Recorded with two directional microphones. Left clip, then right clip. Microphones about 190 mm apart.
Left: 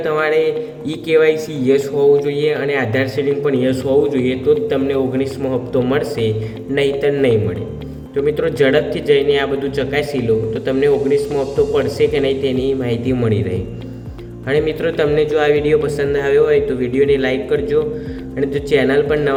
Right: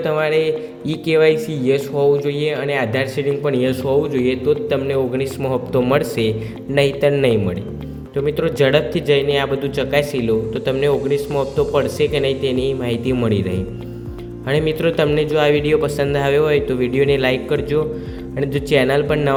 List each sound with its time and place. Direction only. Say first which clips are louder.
0.0 s a man's voice: left 2 dB; 40° right (ahead or behind)